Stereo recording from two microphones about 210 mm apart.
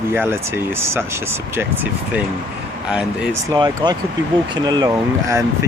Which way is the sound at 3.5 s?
20° right (ahead or behind).